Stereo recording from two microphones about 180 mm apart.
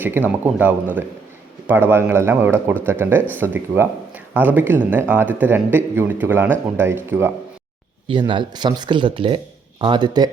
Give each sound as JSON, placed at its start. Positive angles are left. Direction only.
{"t": 0.0, "sound": "a man's voice", "side_deg": -10}
{"t": 8.0, "sound": "speech", "side_deg": -25}